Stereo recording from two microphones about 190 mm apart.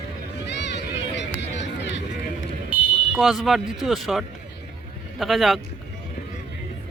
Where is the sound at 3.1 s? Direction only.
Centre (ahead or behind).